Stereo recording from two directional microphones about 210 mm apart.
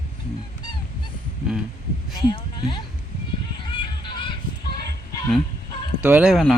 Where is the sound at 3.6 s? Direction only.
25° left (ahead or behind).